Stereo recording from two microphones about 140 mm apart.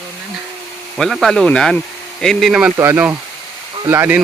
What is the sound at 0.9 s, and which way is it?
Speech, centre (ahead or behind).